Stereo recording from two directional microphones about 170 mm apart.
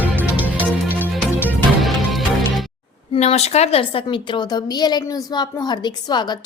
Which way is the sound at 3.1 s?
40° left (ahead or behind).